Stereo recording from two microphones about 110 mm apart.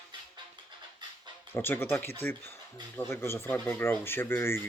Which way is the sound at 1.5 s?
20° left (ahead or behind).